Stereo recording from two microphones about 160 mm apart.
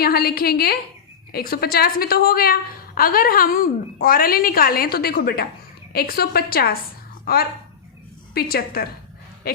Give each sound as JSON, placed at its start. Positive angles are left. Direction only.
{"t": 0.0, "sound": "a woman's voice", "side_deg": 75}